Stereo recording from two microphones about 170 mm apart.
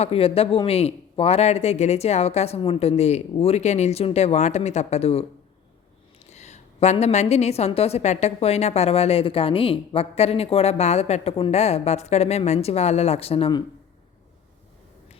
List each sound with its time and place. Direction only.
0.0 s a woman's voice: 35° left (ahead or behind)
6.2 s a woman's voice: 40° left (ahead or behind)